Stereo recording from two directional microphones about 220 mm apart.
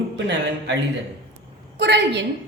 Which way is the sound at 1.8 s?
50° right (ahead or behind).